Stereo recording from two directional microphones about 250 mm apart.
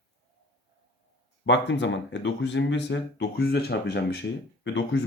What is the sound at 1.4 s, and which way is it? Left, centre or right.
Speech, left.